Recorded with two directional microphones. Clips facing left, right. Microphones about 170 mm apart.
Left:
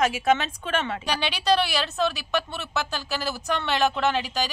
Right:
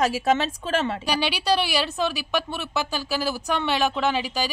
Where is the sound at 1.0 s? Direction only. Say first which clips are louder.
Right 2 dB; 10° right (ahead or behind).